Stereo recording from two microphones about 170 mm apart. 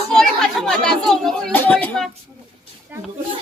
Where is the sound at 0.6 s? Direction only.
5° left (ahead or behind).